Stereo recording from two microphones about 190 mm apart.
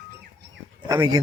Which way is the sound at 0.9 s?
20° right (ahead or behind).